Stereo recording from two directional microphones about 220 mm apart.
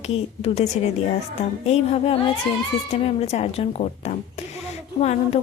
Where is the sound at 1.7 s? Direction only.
25° left (ahead or behind).